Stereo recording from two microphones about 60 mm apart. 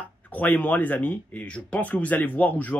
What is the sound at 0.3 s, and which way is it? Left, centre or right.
Speech, left.